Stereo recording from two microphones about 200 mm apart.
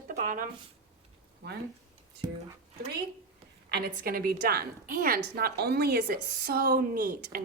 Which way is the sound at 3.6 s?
50° right (ahead or behind).